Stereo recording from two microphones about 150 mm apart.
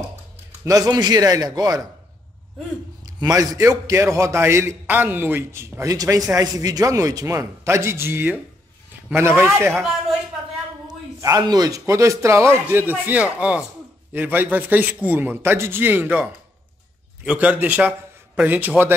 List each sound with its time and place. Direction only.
0.7 s a man's voice: 25° right (ahead or behind)
3.2 s a man's voice: 25° right (ahead or behind)
10.9 s a man's voice: 25° right (ahead or behind)